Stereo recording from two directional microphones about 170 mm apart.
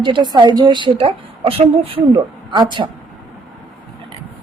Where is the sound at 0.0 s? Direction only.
30° right (ahead or behind).